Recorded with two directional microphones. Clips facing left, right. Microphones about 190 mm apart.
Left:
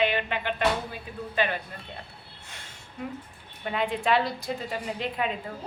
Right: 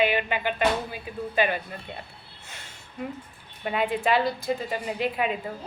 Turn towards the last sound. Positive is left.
turn(degrees=-5)  # may be behind; listen again after turning